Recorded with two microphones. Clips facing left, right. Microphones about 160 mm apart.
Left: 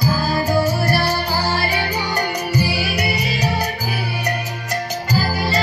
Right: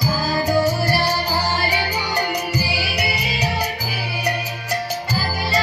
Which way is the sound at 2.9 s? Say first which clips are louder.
Left 2 dB; 10° right (ahead or behind).